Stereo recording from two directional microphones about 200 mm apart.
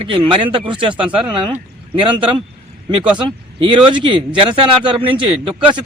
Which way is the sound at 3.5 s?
25° right (ahead or behind).